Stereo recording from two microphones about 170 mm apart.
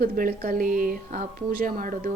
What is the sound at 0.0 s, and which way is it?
A woman's voice, 60° right (ahead or behind).